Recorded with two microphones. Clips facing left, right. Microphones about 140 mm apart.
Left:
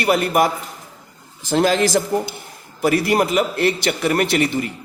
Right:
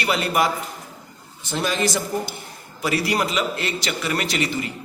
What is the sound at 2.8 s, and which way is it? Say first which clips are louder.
A man's voice: left 6 dB; 50° left (ahead or behind).